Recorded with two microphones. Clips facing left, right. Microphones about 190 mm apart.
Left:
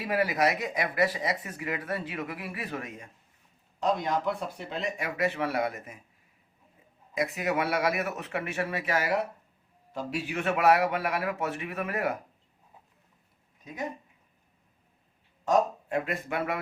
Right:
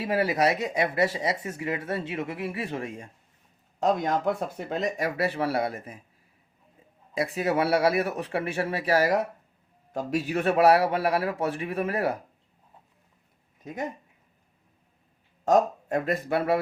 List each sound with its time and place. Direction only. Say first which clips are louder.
0.0 s speech: right 2 dB; 25° right (ahead or behind)
3.8 s speech: right 3 dB; 45° right (ahead or behind)
7.1 s speech: right 3 dB; 30° right (ahead or behind)
15.4 s speech: right 3 dB; 40° right (ahead or behind)